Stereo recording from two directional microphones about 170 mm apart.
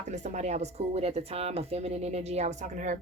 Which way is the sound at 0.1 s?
45° right (ahead or behind).